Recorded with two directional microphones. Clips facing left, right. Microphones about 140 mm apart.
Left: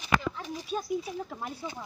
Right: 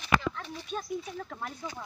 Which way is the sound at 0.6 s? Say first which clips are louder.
Left 4 dB; 5° left (ahead or behind).